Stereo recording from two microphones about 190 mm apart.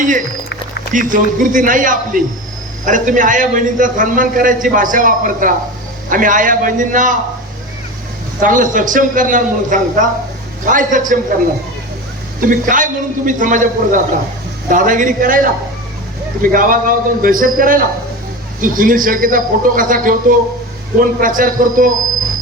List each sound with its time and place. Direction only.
0.0 s a man's voice: 45° right (ahead or behind)
8.4 s a man's voice: 45° right (ahead or behind)
12.5 s a man's voice: 45° right (ahead or behind)
16.5 s a man's voice: 45° right (ahead or behind)